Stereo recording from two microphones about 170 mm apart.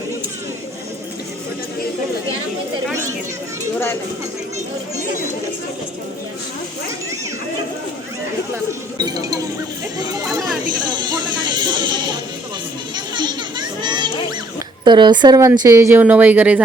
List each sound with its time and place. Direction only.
9.0 s speech: 20° right (ahead or behind)
10.8 s a sound: 25° right (ahead or behind)
13.1 s children playing: 25° right (ahead or behind)
14.8 s speech: 25° right (ahead or behind); by 16.6 s 10° right (ahead or behind)